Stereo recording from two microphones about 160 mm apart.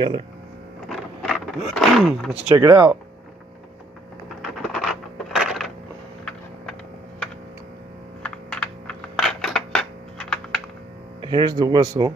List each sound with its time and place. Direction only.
0.8 s printer: centre (ahead or behind)
1.7 s speech: centre (ahead or behind)
2.5 s speech: 20° right (ahead or behind)
4.4 s a sound: 5° left (ahead or behind)
8.2 s computer keyboard: 5° left (ahead or behind)
11.1 s speech: 30° right (ahead or behind)